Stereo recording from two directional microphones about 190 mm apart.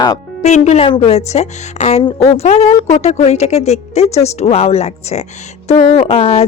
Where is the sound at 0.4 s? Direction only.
35° left (ahead or behind).